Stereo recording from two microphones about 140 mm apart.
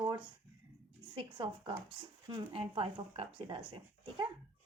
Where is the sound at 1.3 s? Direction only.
35° right (ahead or behind).